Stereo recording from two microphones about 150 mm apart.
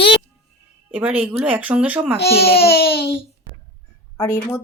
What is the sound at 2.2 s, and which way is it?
Speech, 90° left.